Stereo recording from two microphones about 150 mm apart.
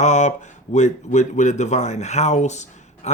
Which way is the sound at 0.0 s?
55° left (ahead or behind).